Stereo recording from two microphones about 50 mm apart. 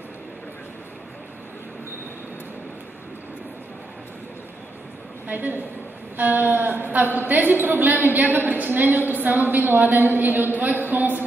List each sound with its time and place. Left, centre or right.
5.3 s a woman's voice: right